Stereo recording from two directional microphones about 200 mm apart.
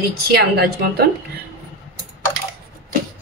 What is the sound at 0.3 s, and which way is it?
Speech, 55° right (ahead or behind).